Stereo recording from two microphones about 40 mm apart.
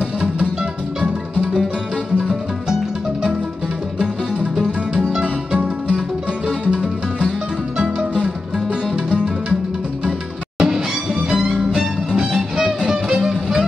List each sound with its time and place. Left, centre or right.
1.4 s music: centre
4.9 s music: centre
7.7 s music: centre
9.1 s music: centre
10.6 s music: centre